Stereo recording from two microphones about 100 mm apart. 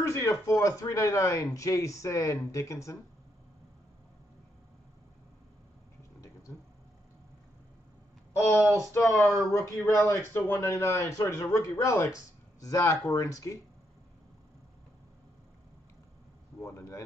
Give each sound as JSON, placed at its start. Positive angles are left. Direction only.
{"t": 0.0, "sound": "speech", "side_deg": 35}
{"t": 8.6, "sound": "a sound", "side_deg": -35}
{"t": 8.9, "sound": "speech", "side_deg": 30}
{"t": 16.6, "sound": "speech", "side_deg": 30}